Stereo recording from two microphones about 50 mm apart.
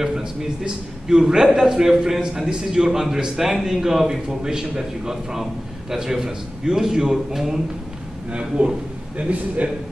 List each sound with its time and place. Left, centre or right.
0.0 s a sound: centre
1.0 s a man's voice: centre
8.3 s a man's voice: right